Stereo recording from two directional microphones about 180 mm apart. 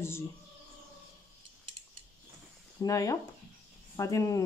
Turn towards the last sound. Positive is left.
turn(degrees=20)  # may be behind; listen again after turning